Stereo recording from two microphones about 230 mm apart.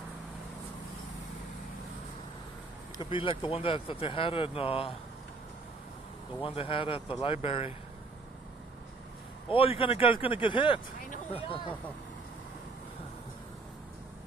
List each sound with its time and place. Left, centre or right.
3.0 s speech: left
6.4 s speech: left
9.5 s speech: left